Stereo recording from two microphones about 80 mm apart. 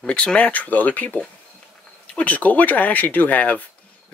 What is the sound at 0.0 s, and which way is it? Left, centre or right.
Speech, centre.